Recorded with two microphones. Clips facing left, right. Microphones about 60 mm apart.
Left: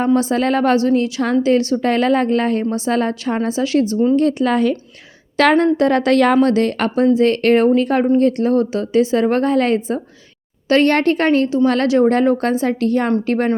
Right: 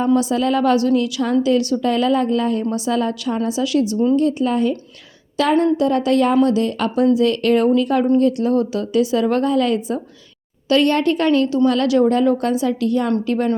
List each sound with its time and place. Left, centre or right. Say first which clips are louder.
0.0 s a woman's voice: left 1 dB; left
2.6 s a woman's voice: left 2 dB; left
4.1 s a woman's voice: left 2 dB; left
5.4 s a woman's voice: left 3 dB; left